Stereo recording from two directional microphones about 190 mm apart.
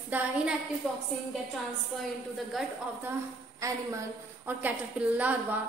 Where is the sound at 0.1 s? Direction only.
10° right (ahead or behind).